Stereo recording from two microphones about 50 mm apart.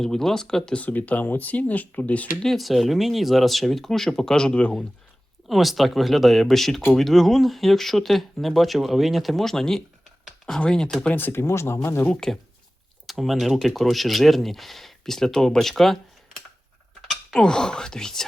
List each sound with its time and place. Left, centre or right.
0.0 s speech: centre
0.8 s speech: left
2.4 s speech: centre
5.5 s speech: centre
11.1 s speech: left
12.2 s speech: centre
13.1 s speech: centre
17.4 s speech: centre